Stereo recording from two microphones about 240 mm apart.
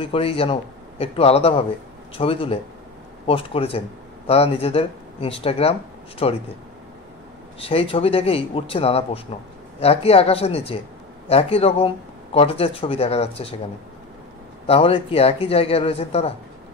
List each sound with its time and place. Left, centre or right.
0.0 s speech: left
7.6 s speech: left
14.7 s speech: left